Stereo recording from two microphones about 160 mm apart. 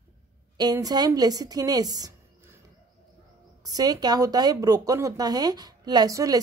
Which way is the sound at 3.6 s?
25° right (ahead or behind).